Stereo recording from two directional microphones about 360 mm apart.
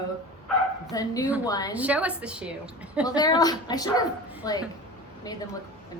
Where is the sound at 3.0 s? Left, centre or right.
Centre.